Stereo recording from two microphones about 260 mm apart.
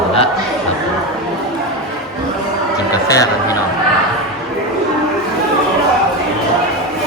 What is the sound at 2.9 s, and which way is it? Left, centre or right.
Speech, centre.